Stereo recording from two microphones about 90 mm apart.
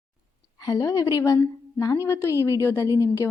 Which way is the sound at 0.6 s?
45° left (ahead or behind).